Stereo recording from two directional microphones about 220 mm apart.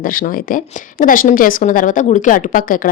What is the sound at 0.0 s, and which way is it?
A woman's voice, 40° left (ahead or behind).